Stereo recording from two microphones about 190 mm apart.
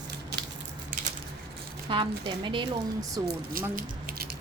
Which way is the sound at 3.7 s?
50° right (ahead or behind).